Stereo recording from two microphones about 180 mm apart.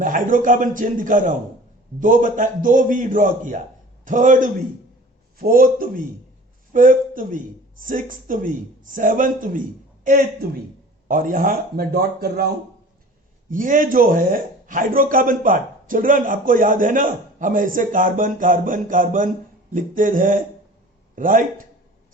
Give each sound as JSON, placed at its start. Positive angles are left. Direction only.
{"t": 0.0, "sound": "speech", "side_deg": -45}
{"t": 13.5, "sound": "speech", "side_deg": -50}